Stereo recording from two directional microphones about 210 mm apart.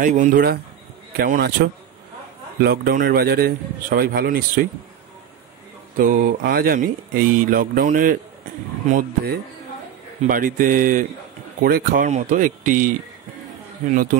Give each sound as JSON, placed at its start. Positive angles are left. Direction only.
{"t": 0.0, "sound": "a man's voice", "side_deg": -40}
{"t": 5.9, "sound": "a man's voice", "side_deg": -40}